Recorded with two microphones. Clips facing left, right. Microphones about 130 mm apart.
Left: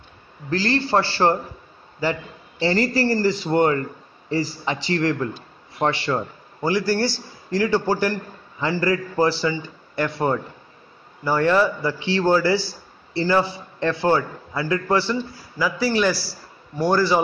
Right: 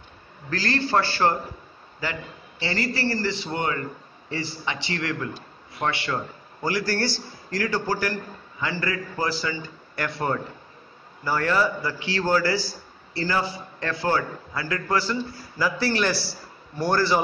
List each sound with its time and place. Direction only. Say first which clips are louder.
0.5 s a man's voice: left 4 dB; 25° left (ahead or behind)
2.6 s a man's voice: left 7 dB; 40° left (ahead or behind); by 15.1 s 25° left (ahead or behind)
15.5 s a man's voice: left 3 dB; 10° left (ahead or behind)